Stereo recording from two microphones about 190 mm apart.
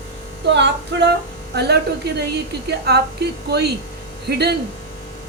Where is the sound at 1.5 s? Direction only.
60° right (ahead or behind).